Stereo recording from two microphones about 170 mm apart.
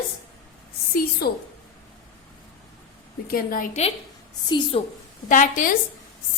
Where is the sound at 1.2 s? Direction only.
70° left (ahead or behind).